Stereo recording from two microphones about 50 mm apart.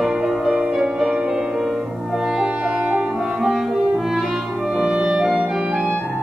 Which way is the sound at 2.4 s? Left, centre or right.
Right.